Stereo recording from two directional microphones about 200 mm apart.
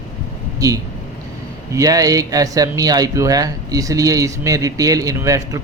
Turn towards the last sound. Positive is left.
turn(degrees=-15)  # may be behind; listen again after turning